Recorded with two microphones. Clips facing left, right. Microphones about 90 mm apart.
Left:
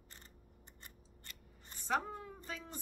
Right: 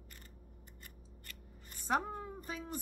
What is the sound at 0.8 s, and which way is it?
Scissors, 25° left (ahead or behind).